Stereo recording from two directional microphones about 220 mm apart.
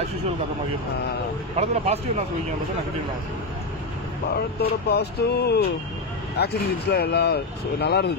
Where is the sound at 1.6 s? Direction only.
30° right (ahead or behind).